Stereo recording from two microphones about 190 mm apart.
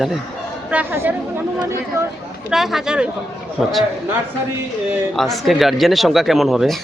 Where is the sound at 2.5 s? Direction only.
Centre (ahead or behind).